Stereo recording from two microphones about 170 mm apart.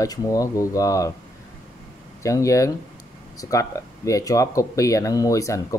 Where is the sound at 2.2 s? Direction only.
20° left (ahead or behind).